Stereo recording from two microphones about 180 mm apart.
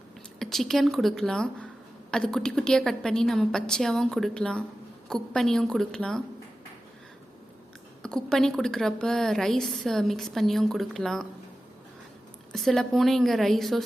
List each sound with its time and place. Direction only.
0.3 s a woman's voice: centre (ahead or behind)
8.0 s a woman's voice: 5° left (ahead or behind)
12.5 s a woman's voice: centre (ahead or behind)